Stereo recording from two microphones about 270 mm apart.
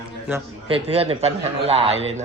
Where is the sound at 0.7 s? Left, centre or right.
Right.